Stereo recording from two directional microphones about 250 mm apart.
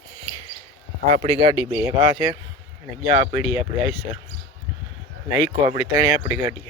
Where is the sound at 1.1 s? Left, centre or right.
Right.